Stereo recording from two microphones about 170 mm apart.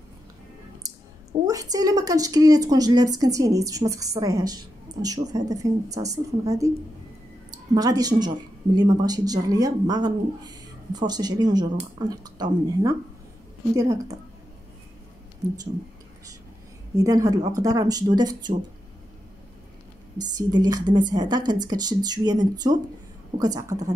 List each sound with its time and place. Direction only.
0.8 s a sound: 20° right (ahead or behind)
1.4 s speech: 20° right (ahead or behind)
7.7 s speech: 20° right (ahead or behind)
16.9 s speech: 20° right (ahead or behind)
20.3 s speech: 25° right (ahead or behind)